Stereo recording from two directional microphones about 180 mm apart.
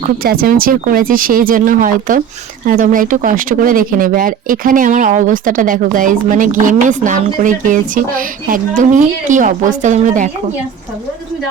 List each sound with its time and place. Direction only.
0.2 s speech: 55° right (ahead or behind)